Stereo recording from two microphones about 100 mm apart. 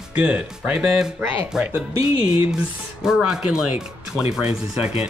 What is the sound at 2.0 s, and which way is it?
Speech, 70° left (ahead or behind).